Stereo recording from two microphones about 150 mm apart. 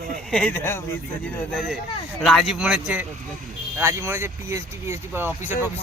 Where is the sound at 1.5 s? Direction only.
Centre (ahead or behind).